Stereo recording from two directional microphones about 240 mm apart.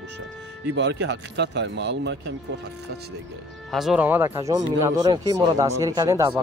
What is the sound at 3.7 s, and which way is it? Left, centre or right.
Speech, centre.